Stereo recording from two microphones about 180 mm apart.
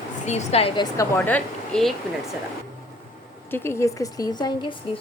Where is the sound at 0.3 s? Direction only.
35° left (ahead or behind).